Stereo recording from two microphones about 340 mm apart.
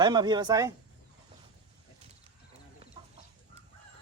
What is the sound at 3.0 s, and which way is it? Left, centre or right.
Chicken, centre.